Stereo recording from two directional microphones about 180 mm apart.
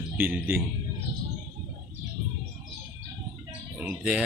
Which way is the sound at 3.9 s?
5° right (ahead or behind).